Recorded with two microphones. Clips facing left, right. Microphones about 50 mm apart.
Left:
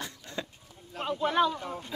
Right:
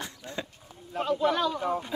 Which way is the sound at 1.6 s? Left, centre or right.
Right.